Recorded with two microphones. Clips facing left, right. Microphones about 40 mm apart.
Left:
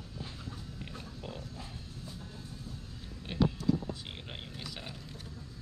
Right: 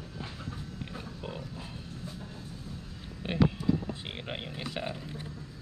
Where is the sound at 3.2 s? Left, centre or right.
Right.